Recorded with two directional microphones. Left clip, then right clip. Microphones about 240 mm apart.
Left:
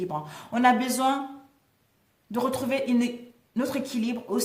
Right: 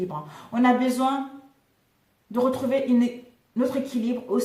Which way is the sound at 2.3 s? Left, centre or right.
Left.